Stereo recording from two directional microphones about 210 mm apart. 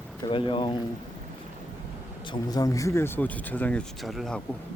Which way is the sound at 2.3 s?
15° left (ahead or behind).